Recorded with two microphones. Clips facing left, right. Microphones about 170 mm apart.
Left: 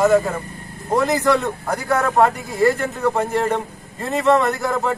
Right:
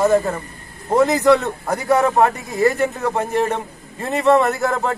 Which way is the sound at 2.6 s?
15° right (ahead or behind).